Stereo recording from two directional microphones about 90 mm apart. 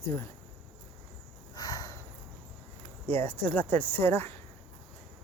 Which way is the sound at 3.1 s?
25° left (ahead or behind).